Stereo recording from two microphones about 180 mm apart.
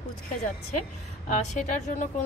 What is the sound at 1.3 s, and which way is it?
Speech, 45° left (ahead or behind).